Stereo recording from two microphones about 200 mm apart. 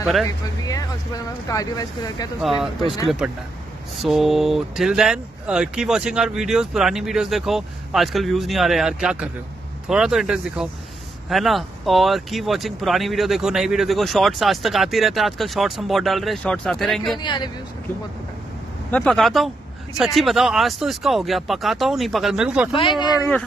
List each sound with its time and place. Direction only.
0.7 s speech: 20° left (ahead or behind)
3.2 s speech: 5° right (ahead or behind)
17.2 s speech: 20° left (ahead or behind)
18.9 s speech: 5° left (ahead or behind)
22.8 s speech: 25° left (ahead or behind)